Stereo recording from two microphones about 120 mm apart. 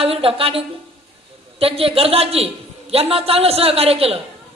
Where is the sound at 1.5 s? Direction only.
50° right (ahead or behind).